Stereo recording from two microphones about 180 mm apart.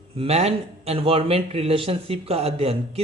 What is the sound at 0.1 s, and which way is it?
Speech, 35° right (ahead or behind).